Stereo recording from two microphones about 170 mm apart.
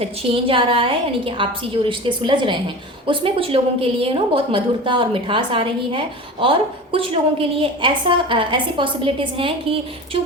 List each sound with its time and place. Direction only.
0.0 s a woman's voice: 35° right (ahead or behind)